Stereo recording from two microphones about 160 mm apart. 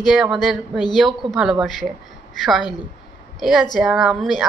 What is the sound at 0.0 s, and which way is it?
Speech, centre (ahead or behind).